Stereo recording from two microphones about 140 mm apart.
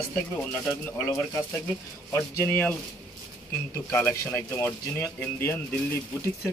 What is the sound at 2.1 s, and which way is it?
Speech, 15° left (ahead or behind).